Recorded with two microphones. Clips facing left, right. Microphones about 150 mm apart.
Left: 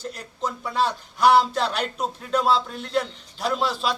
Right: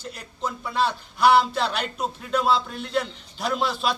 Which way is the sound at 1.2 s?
40° left (ahead or behind).